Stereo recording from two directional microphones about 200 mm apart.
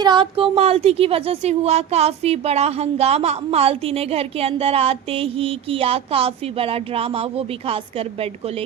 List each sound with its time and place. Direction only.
0.0 s speech: 25° right (ahead or behind)